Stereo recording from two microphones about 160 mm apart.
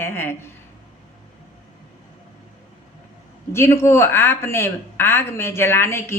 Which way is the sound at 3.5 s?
15° left (ahead or behind).